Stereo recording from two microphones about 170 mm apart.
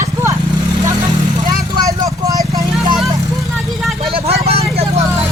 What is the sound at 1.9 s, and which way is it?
Vehicle, 20° right (ahead or behind).